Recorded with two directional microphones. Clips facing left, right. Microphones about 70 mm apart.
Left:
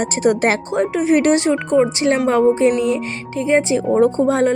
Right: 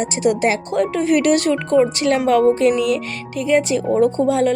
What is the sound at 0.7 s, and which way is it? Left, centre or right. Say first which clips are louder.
Speech: left 1 dB; left.